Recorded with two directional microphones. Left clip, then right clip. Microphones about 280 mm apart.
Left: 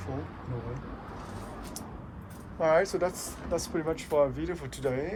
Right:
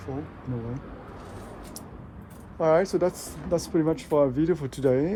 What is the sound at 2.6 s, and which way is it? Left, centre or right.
Speech, right.